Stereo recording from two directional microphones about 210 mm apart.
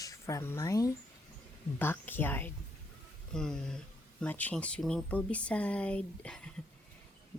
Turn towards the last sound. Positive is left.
turn(degrees=5)  # may be behind; listen again after turning